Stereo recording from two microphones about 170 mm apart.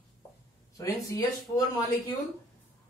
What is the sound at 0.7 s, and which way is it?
Speech, 20° left (ahead or behind).